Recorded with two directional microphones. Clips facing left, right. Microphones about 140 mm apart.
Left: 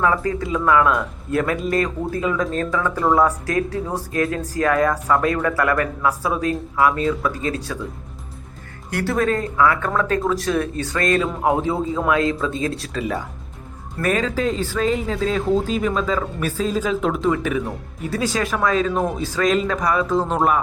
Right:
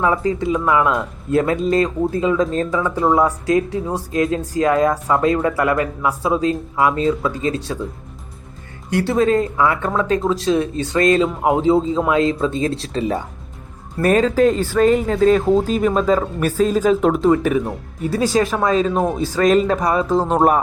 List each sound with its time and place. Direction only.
0.0 s speech: 20° right (ahead or behind)
8.9 s speech: 25° right (ahead or behind)
14.0 s speech: 40° right (ahead or behind)
18.6 s speech: 25° right (ahead or behind)
19.4 s speech: 40° right (ahead or behind)